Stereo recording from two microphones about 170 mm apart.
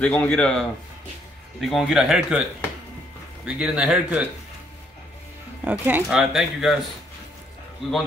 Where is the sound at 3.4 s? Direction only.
5° right (ahead or behind).